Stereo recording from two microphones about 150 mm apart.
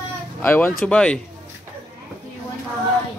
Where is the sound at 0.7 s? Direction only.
5° left (ahead or behind).